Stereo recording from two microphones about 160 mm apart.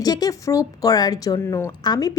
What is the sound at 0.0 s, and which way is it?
A woman's voice, 25° left (ahead or behind).